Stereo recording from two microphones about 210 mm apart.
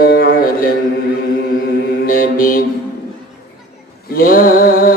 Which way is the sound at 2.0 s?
45° left (ahead or behind).